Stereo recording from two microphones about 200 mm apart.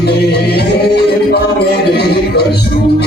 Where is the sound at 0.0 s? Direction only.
55° left (ahead or behind).